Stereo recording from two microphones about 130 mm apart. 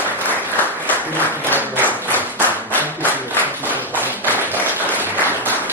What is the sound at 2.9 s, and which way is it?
Clapping, 15° right (ahead or behind).